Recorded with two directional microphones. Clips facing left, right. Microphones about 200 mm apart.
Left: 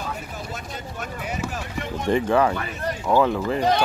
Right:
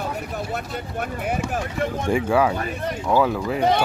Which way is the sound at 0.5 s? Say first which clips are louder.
Right 5 dB; 55° right (ahead or behind).